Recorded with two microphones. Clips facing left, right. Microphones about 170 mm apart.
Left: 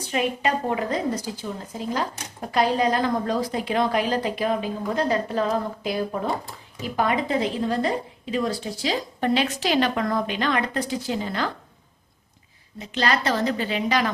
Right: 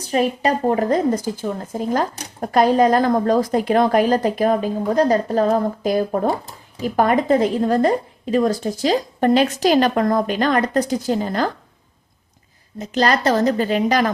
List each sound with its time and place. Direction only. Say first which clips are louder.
0.0 s a woman's voice: right 5 dB; 40° right (ahead or behind)
12.8 s a woman's voice: right 6 dB; 45° right (ahead or behind)